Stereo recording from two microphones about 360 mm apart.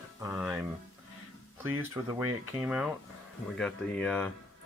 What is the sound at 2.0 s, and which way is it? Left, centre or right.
Speech, centre.